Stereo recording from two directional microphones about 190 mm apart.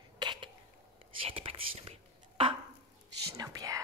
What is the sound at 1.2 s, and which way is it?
Speech, 30° right (ahead or behind).